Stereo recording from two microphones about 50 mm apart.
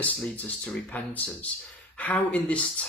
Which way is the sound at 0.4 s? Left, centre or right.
Left.